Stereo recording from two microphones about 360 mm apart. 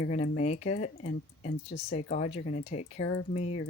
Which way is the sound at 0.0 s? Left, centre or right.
Centre.